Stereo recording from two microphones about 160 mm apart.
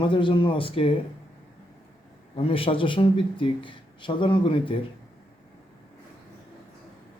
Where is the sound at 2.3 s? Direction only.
35° left (ahead or behind).